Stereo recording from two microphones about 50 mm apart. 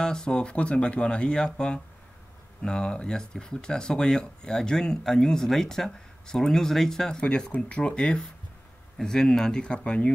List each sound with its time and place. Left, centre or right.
0.0 s speech: centre
7.5 s speech: left
7.8 s speech: centre